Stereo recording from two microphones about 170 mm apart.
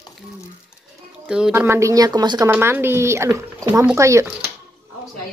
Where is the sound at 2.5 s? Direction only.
15° right (ahead or behind).